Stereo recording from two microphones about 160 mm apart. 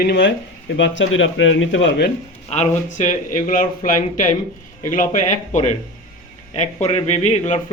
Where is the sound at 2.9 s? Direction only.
55° left (ahead or behind).